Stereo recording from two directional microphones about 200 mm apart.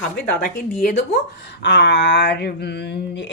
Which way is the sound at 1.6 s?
60° left (ahead or behind).